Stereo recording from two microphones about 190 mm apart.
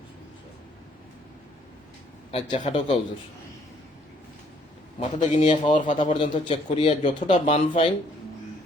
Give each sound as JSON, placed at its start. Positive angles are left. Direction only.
{"t": 2.3, "sound": "a man's voice", "side_deg": 35}
{"t": 4.9, "sound": "a man's voice", "side_deg": 35}
{"t": 6.0, "sound": "a man's voice", "side_deg": 25}